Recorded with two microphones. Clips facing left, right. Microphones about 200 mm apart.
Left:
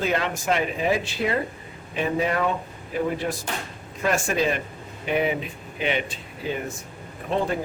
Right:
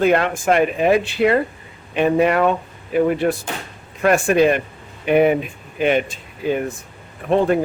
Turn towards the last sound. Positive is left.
turn(degrees=-60)  # may be behind; listen again after turning